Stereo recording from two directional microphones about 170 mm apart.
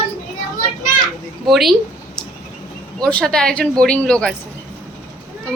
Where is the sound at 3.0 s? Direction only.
5° left (ahead or behind).